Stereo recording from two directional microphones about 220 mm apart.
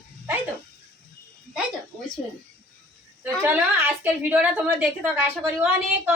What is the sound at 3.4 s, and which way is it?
A woman's voice, 10° right (ahead or behind).